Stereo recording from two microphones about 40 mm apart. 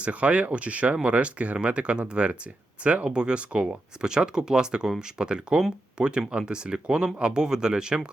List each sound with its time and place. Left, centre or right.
0.0 s speech: right